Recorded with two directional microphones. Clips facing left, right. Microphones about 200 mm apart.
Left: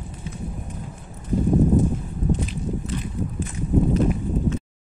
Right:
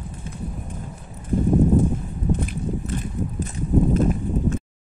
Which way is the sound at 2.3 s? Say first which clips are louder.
Right 1 dB; 55° right (ahead or behind).